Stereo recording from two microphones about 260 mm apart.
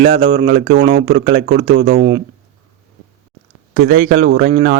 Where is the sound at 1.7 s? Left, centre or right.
Right.